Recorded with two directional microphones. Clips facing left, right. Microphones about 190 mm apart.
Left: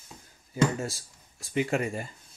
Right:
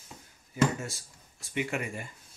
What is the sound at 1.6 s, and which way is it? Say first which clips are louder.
Speech: left 5 dB; 35° left (ahead or behind).